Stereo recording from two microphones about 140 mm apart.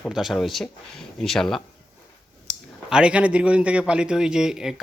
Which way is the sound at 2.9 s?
5° right (ahead or behind).